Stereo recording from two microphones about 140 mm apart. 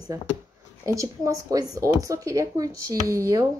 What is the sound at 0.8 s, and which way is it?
A woman's voice, 20° right (ahead or behind).